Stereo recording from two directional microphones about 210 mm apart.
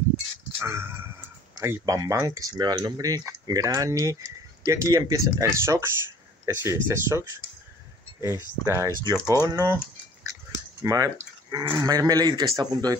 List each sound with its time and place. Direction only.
0.6 s speech: 10° right (ahead or behind)
10.8 s speech: 15° right (ahead or behind)